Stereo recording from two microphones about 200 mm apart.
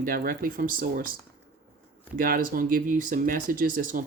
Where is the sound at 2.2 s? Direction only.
45° right (ahead or behind).